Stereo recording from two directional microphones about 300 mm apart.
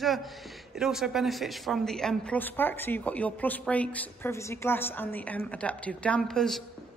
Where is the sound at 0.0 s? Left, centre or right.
Centre.